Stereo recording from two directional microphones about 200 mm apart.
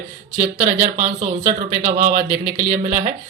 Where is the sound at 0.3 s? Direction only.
40° right (ahead or behind).